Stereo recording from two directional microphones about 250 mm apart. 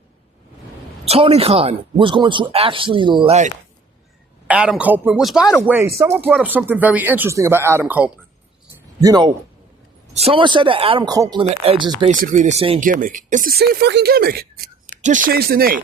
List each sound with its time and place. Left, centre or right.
1.0 s speech: right
4.4 s speech: centre
12.2 s speech: right